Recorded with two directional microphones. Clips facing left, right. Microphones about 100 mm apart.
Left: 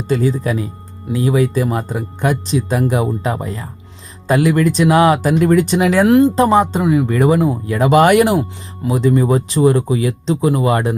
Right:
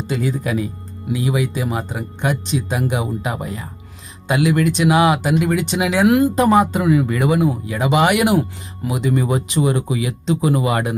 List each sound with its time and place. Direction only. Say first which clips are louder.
0.1 s speech: left 5 dB; 35° left (ahead or behind)
8.4 s speech: left 1 dB; 30° left (ahead or behind)